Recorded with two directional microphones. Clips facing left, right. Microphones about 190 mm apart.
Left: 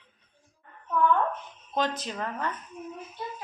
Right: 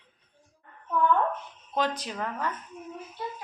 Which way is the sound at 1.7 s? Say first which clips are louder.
Even; 10° right (ahead or behind).